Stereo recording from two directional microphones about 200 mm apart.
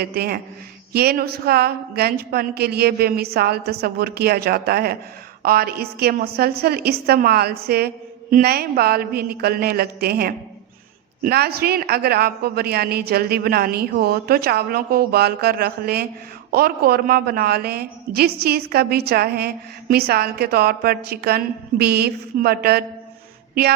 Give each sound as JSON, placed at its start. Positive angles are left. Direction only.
{"t": 0.0, "sound": "a woman's voice", "side_deg": -50}